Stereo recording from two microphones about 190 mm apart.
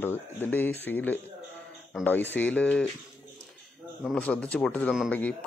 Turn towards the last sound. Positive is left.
turn(degrees=5)  # may be behind; listen again after turning